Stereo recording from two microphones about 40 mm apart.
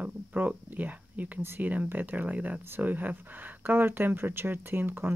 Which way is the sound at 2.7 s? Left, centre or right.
Right.